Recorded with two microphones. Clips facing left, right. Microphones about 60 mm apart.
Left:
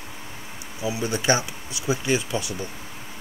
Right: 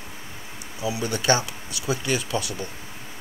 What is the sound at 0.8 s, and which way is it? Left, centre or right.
Speech, left.